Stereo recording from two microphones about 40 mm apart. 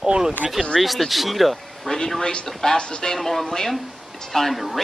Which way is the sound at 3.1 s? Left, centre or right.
Centre.